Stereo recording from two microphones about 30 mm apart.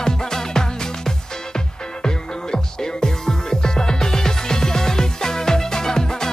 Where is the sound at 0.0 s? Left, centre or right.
Centre.